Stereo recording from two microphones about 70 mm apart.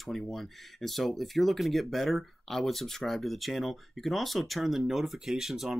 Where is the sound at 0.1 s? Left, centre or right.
Centre.